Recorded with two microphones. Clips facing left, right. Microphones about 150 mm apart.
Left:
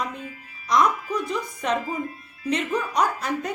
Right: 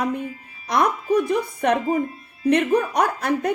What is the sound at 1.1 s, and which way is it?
A woman's voice, 60° right (ahead or behind).